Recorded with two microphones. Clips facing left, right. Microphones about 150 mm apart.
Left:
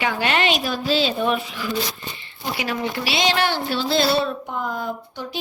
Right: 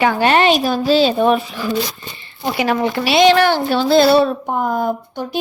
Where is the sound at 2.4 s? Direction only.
70° right (ahead or behind).